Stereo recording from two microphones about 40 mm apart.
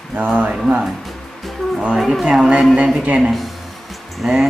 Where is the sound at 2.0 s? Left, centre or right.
Centre.